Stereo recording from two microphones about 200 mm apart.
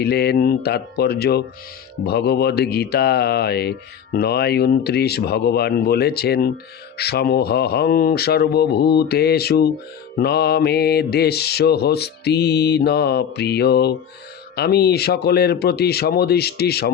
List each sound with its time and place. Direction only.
0.0 s speech: 50° left (ahead or behind)